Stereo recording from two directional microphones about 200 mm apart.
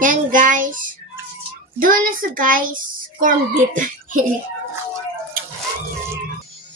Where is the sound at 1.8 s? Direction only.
45° right (ahead or behind).